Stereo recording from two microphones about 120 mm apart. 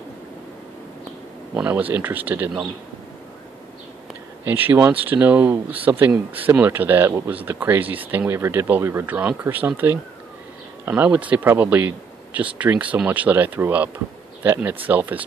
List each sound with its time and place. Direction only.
1.5 s speech: 15° right (ahead or behind)
4.5 s speech: 15° right (ahead or behind)